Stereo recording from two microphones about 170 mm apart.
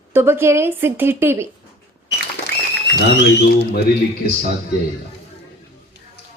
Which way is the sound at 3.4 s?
70° left (ahead or behind).